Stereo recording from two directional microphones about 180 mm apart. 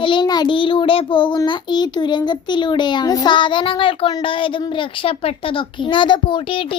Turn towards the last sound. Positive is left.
turn(degrees=25)  # may be behind; listen again after turning